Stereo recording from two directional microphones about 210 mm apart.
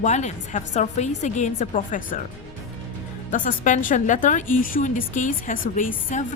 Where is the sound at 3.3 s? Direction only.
40° left (ahead or behind).